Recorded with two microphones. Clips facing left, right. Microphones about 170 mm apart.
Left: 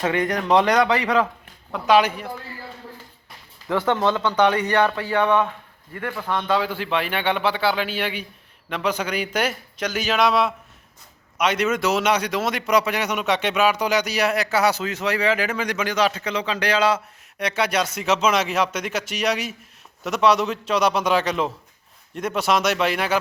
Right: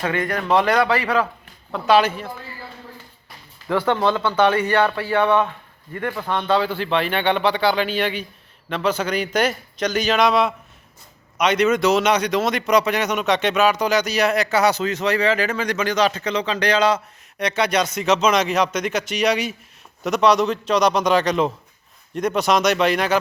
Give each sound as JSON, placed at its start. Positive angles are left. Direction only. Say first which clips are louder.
{"t": 0.0, "sound": "speech", "louder": "left 1 dB", "side_deg": 20}
{"t": 3.7, "sound": "speech", "louder": "right 1 dB", "side_deg": 20}
{"t": 6.1, "sound": "a man's voice", "louder": "even", "side_deg": -15}
{"t": 6.5, "sound": "a man's voice", "louder": "right 3 dB", "side_deg": 10}